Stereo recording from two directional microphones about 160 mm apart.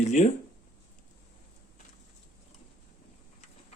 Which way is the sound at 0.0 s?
45° left (ahead or behind).